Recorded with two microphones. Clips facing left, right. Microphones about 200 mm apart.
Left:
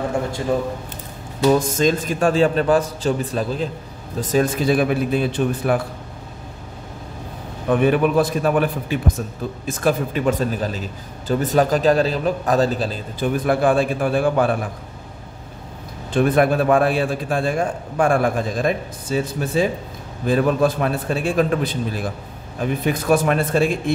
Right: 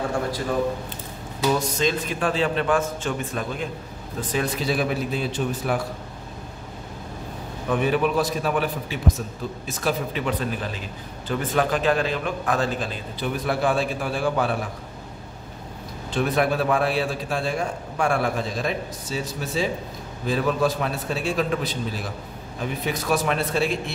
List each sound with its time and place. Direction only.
1.6 s a man's voice: 45° left (ahead or behind)
7.8 s a man's voice: 55° left (ahead or behind); by 13.3 s 35° left (ahead or behind)
13.5 s a man's voice: 50° left (ahead or behind)
16.1 s a man's voice: 50° left (ahead or behind)